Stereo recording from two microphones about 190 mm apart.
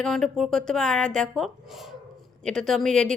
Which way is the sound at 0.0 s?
Centre (ahead or behind).